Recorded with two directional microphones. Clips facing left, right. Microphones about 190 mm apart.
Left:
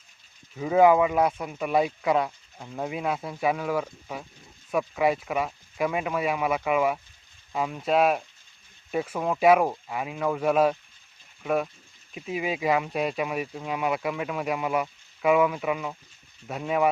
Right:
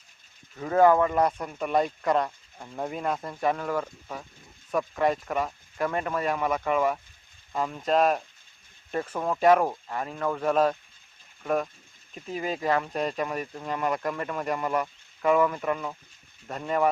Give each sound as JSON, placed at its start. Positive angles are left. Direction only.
{"t": 0.5, "sound": "speech", "side_deg": 10}